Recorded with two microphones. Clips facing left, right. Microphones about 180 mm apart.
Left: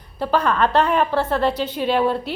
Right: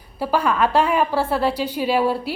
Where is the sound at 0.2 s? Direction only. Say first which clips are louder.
Even; 10° right (ahead or behind).